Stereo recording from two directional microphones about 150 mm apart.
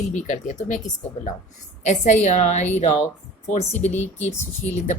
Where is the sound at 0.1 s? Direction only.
55° left (ahead or behind).